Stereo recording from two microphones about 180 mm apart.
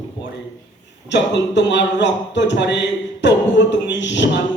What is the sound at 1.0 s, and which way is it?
A man's voice, 75° left (ahead or behind).